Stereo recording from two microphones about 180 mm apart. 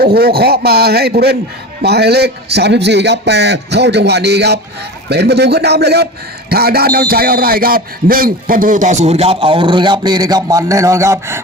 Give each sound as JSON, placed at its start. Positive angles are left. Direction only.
{"t": 0.0, "sound": "a man's voice", "side_deg": -60}